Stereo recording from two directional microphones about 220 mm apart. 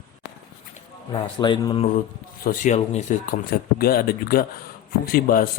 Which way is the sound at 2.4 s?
35° left (ahead or behind).